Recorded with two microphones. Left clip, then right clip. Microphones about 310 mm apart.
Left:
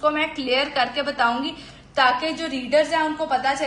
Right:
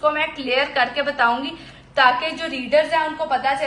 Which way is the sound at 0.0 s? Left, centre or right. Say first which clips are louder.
Right 1 dB; centre.